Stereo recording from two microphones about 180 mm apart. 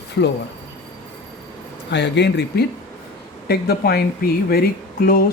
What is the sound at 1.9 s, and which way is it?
Speech, 75° left (ahead or behind).